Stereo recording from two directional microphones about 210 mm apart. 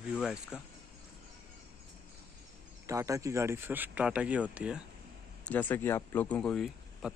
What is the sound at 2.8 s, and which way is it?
Speech, 15° right (ahead or behind).